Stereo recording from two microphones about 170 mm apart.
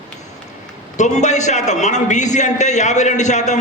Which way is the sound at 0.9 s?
45° left (ahead or behind).